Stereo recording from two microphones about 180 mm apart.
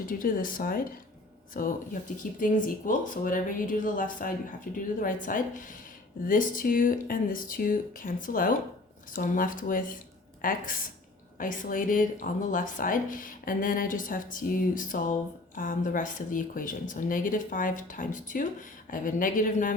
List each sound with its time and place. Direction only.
0.0 s speech: 50° left (ahead or behind)